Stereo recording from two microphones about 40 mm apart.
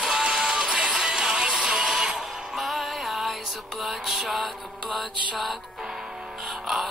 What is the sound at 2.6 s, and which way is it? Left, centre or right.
Music, centre.